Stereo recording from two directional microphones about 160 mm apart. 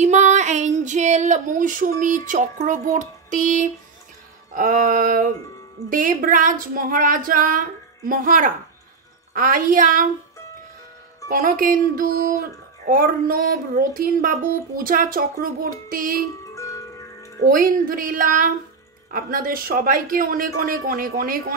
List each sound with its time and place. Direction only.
0.0 s female singing: 45° right (ahead or behind)
4.5 s music: 60° right (ahead or behind)
11.2 s music: 60° right (ahead or behind)
16.5 s music: 20° left (ahead or behind)
17.4 s music: 60° right (ahead or behind)